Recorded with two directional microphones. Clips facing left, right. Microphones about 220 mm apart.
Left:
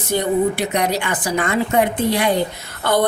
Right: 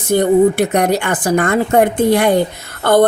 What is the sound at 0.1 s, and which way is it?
A woman's voice, 50° right (ahead or behind).